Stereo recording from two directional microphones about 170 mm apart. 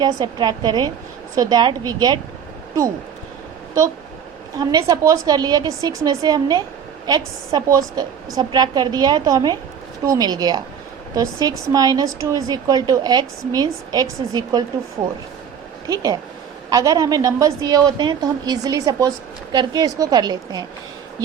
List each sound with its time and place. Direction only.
0.0 s a woman's voice: 25° right (ahead or behind)
4.5 s a woman's voice: 20° right (ahead or behind)
16.6 s a woman's voice: 20° right (ahead or behind)